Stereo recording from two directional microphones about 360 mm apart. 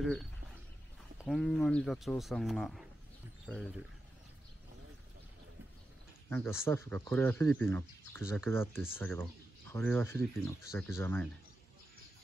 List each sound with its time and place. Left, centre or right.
0.0 s speech: centre
6.2 s speech: centre